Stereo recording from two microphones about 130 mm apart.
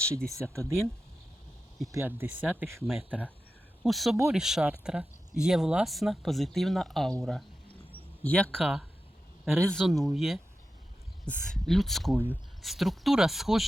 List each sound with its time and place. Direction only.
0.5 s speech: 20° right (ahead or behind)
1.9 s speech: 20° right (ahead or behind)
2.8 s speech: centre (ahead or behind)
3.1 s speech: 10° right (ahead or behind)
3.8 s speech: centre (ahead or behind)